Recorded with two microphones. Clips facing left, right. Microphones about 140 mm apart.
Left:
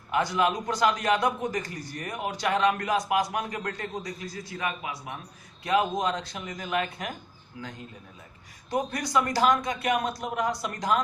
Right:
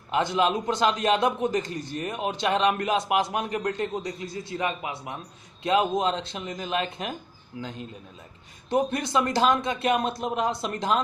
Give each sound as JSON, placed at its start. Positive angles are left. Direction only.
{"t": 0.1, "sound": "a man's voice", "side_deg": -25}
{"t": 8.6, "sound": "a man's voice", "side_deg": -25}